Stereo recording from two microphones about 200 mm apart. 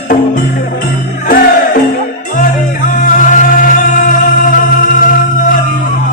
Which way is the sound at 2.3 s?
45° left (ahead or behind).